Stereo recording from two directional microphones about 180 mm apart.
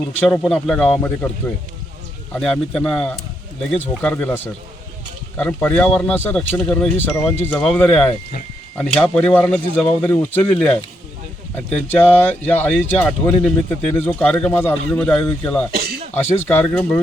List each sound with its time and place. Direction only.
0.2 s speech: 5° left (ahead or behind)
15.7 s throat clearing: 60° right (ahead or behind)
16.1 s speech: 10° left (ahead or behind)